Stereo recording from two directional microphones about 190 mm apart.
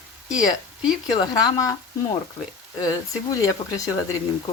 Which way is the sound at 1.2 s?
20° left (ahead or behind).